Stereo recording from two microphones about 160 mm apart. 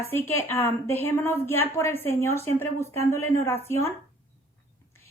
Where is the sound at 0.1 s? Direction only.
15° left (ahead or behind).